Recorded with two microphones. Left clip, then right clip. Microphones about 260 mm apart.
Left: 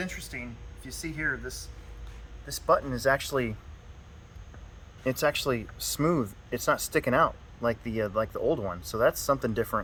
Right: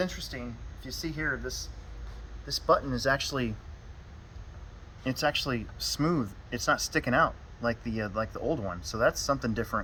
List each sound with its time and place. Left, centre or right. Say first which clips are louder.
0.0 s speech: right 3 dB; centre
5.0 s speech: left 2 dB; left